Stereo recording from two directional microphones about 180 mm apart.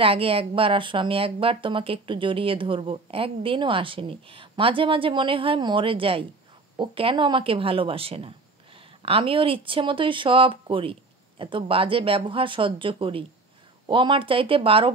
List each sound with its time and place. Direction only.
0.0 s speech: 30° right (ahead or behind)